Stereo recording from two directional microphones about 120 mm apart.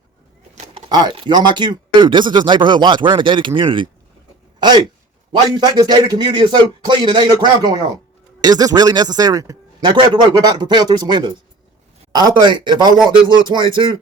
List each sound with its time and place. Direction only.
0.9 s a man's voice: 35° right (ahead or behind)